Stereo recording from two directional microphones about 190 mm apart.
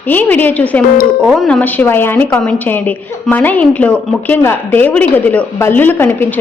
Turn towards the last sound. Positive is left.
turn(degrees=10)  # may be behind; listen again after turning